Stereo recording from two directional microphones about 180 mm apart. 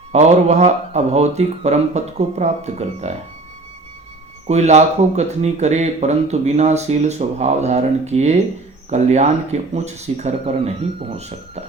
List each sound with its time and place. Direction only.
0.1 s speech: 40° right (ahead or behind)
4.4 s speech: 35° right (ahead or behind)